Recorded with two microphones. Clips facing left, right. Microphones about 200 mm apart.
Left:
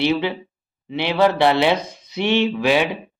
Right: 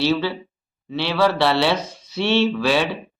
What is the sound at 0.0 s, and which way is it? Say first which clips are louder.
Speech: left 1 dB; 20° left (ahead or behind).